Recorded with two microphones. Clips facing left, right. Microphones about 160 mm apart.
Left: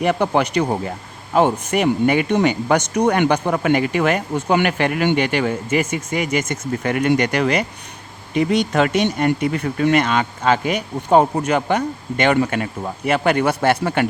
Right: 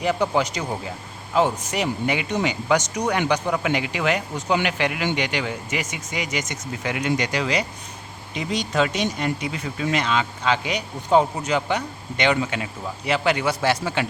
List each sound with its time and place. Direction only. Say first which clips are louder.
0.0 s speech: left 4 dB; 60° left (ahead or behind)